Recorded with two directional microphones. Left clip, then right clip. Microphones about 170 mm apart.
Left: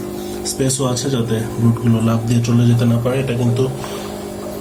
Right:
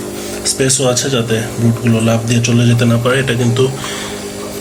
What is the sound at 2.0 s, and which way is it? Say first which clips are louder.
Speech: right 5 dB; 25° left (ahead or behind).